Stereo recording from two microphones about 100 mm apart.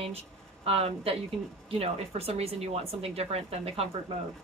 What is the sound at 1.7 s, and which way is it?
Speech, 90° right.